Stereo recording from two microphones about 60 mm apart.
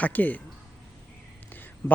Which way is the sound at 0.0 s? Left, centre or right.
Left.